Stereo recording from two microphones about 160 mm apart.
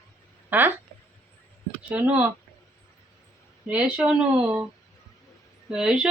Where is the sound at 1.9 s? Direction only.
10° right (ahead or behind).